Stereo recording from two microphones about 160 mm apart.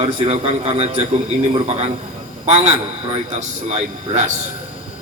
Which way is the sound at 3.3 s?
45° right (ahead or behind).